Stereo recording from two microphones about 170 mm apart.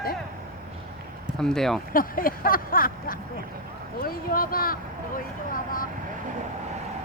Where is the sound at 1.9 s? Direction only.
55° left (ahead or behind).